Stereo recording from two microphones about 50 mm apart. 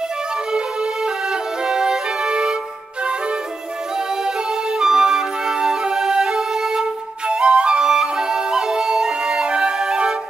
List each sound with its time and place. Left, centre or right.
0.5 s music: centre
4.7 s music: centre